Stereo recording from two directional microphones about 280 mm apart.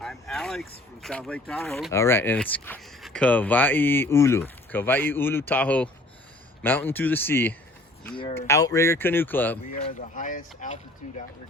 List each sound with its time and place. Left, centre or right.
0.0 s speech: centre
8.1 s speech: centre
10.2 s speech: left